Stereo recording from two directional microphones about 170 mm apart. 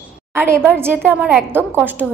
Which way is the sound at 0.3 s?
15° right (ahead or behind).